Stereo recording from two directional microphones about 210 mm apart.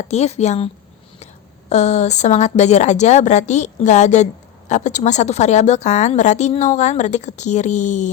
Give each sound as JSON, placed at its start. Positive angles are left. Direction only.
{"t": 0.0, "sound": "a woman's voice", "side_deg": 30}
{"t": 1.7, "sound": "a woman's voice", "side_deg": 30}